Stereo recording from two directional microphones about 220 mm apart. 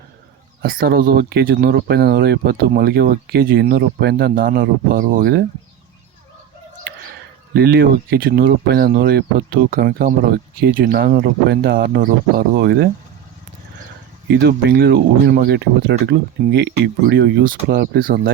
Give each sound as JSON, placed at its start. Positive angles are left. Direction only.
{"t": 0.6, "sound": "speech", "side_deg": -40}
{"t": 7.5, "sound": "speech", "side_deg": -45}
{"t": 14.3, "sound": "speech", "side_deg": -50}